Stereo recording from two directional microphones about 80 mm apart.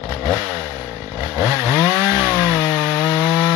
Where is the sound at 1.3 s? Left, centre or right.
Right.